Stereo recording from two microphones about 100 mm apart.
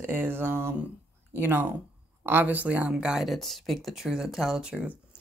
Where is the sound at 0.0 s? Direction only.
20° right (ahead or behind).